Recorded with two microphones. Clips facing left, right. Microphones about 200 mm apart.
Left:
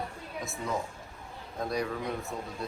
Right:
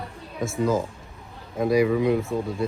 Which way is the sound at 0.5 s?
90° right.